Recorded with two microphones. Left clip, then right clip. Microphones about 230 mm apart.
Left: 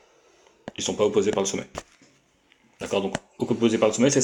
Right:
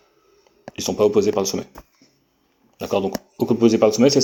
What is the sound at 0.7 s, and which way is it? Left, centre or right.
Speech, right.